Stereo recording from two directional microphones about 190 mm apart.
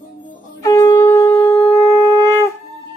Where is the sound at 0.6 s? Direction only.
20° left (ahead or behind).